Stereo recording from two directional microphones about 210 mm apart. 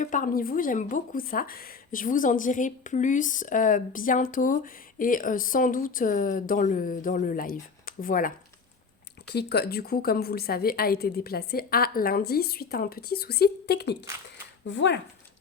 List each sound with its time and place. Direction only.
0.0 s speech: 40° left (ahead or behind)
9.3 s a woman's voice: 50° left (ahead or behind)